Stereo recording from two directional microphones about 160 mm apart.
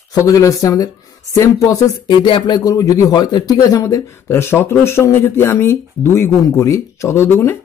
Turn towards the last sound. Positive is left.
turn(degrees=15)  # may be behind; listen again after turning